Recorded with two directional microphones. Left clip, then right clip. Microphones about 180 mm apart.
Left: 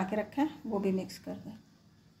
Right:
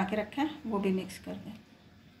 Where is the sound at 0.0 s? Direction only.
45° left (ahead or behind).